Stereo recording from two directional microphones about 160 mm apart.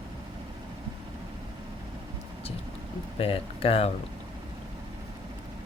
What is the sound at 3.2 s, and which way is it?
Speech, 35° left (ahead or behind).